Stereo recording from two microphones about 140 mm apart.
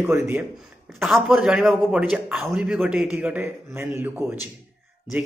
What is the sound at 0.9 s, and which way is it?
A man's voice, centre (ahead or behind).